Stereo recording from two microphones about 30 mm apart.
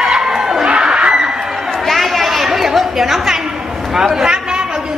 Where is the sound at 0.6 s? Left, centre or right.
Right.